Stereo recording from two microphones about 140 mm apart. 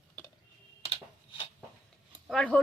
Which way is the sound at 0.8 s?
45° left (ahead or behind).